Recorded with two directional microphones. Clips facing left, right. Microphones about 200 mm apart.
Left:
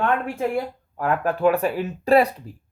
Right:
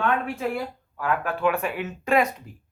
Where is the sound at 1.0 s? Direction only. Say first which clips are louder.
Left 4 dB; 40° left (ahead or behind).